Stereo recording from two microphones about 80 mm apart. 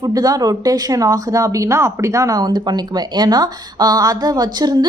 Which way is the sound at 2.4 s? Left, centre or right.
Right.